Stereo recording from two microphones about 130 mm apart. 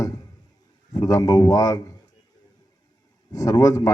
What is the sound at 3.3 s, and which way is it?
Speech, 30° left (ahead or behind).